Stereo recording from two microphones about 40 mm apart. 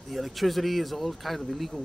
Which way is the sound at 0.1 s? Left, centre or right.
Centre.